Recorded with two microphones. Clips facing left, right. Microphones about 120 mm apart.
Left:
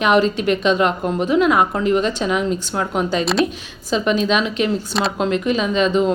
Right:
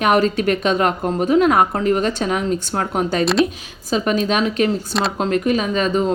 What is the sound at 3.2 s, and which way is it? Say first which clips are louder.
Speech: right 3 dB; centre (ahead or behind).